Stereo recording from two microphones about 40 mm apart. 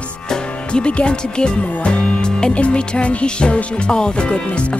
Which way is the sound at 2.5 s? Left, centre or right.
Left.